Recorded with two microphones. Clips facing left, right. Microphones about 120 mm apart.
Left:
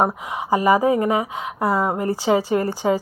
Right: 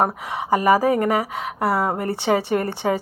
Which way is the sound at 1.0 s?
70° right (ahead or behind).